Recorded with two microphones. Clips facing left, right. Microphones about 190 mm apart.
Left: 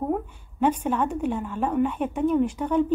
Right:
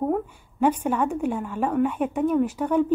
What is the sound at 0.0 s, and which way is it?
A woman's voice, 5° right (ahead or behind).